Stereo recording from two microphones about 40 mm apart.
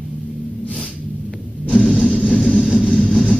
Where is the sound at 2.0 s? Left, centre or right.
Centre.